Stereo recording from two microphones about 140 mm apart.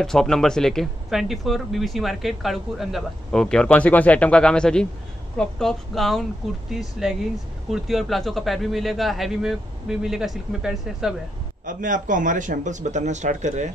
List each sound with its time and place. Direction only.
0.0 s speech: 5° left (ahead or behind)
11.6 s speech: 70° right (ahead or behind)